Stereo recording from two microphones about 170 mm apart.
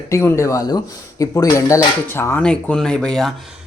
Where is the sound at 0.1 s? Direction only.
15° left (ahead or behind).